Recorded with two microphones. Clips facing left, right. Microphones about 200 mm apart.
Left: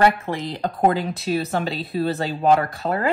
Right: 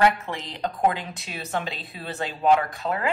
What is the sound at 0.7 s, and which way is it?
Speech, 50° left (ahead or behind).